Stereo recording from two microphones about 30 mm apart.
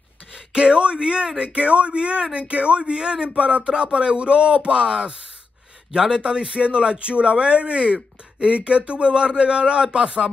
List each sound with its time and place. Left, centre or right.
0.5 s speech: right
1.4 s speech: right
3.3 s speech: right
3.6 s speech: right